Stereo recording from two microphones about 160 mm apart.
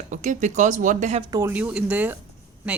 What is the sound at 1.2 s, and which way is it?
Speech, 25° right (ahead or behind).